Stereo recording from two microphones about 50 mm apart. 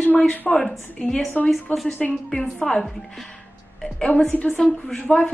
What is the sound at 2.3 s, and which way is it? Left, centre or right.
Speech, centre.